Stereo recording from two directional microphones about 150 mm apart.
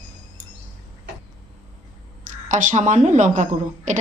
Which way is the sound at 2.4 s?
55° right (ahead or behind).